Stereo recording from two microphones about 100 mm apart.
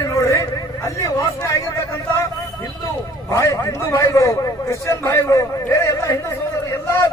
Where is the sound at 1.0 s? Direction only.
30° left (ahead or behind).